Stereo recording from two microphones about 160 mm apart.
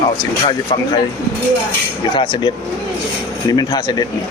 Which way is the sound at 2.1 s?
30° left (ahead or behind).